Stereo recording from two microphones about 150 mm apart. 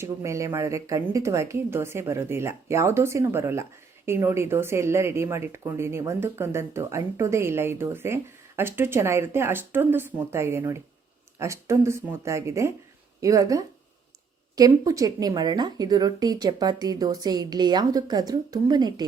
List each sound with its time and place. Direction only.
0.0 s a woman's voice: 20° right (ahead or behind)
14.8 s a woman's voice: 25° right (ahead or behind)